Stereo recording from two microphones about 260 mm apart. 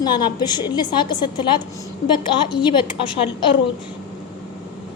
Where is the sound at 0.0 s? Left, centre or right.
Centre.